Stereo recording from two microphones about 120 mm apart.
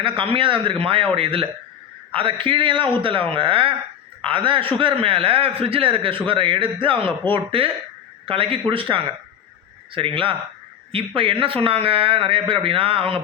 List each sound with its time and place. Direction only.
0.0 s a man's voice: 45° right (ahead or behind)